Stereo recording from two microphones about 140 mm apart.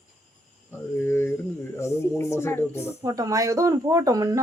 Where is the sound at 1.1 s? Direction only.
15° left (ahead or behind).